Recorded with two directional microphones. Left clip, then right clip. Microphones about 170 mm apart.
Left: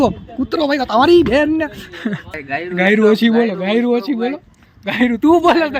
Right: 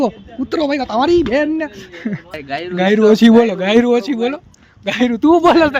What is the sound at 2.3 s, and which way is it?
Speech, 65° right (ahead or behind).